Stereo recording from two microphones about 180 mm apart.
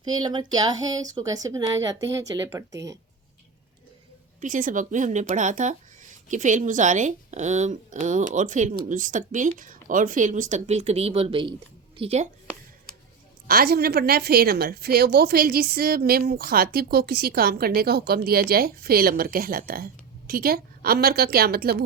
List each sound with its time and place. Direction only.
0.0 s speech: 25° right (ahead or behind)
4.4 s a woman's voice: 45° right (ahead or behind)
13.5 s a woman's voice: 60° right (ahead or behind)